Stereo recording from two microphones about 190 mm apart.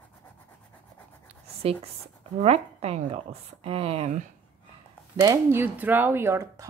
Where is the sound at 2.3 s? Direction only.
35° right (ahead or behind).